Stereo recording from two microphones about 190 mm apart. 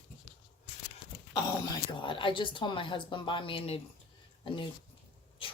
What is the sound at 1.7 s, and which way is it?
Speech, 25° left (ahead or behind).